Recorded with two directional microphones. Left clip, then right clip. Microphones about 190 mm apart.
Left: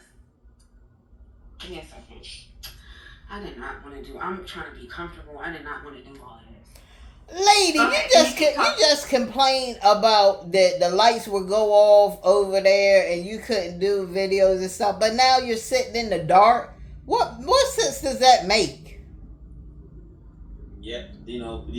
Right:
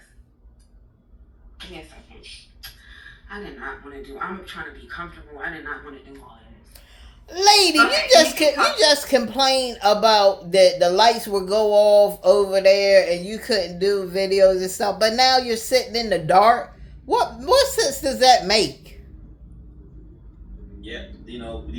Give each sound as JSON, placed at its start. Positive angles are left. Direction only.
{"t": 7.3, "sound": "speech", "side_deg": -30}